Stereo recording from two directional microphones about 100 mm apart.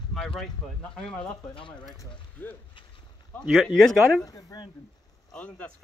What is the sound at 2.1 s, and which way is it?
Speech, 20° left (ahead or behind).